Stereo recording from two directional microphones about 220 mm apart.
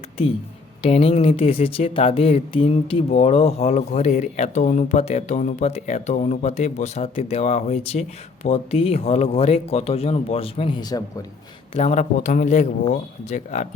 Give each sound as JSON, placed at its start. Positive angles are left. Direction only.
{"t": 0.8, "sound": "speech", "side_deg": 25}
{"t": 11.7, "sound": "a man's voice", "side_deg": 30}